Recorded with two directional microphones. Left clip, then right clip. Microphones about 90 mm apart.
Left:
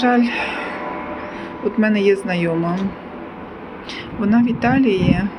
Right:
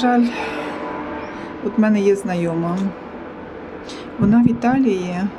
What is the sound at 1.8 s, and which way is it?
Speech, 35° right (ahead or behind).